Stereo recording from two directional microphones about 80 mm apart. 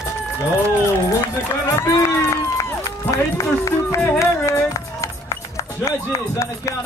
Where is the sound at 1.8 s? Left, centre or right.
Left.